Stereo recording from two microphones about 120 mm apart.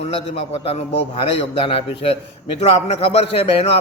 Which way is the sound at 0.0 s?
55° left (ahead or behind).